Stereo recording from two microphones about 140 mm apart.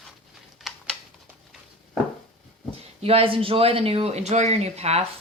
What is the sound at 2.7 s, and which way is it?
Speech, 45° right (ahead or behind).